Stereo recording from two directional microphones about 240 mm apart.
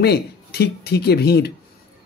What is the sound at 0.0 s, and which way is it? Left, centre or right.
Speech, left.